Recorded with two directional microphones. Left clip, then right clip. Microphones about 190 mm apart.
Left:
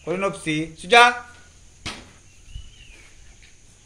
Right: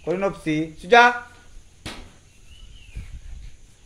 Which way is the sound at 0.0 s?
40° right (ahead or behind).